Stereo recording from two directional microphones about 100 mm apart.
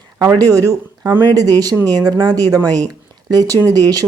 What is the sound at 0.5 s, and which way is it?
Speech, 35° right (ahead or behind).